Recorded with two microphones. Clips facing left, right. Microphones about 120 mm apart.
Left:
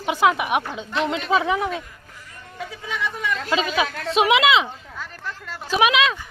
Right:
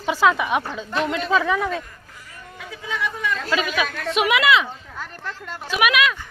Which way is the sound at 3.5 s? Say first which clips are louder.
Left 2 dB; 25° left (ahead or behind).